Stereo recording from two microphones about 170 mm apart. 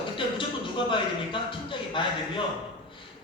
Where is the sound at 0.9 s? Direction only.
30° left (ahead or behind).